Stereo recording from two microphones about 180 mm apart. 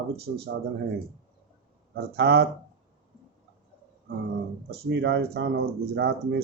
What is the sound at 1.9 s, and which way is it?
Speech, 65° right (ahead or behind).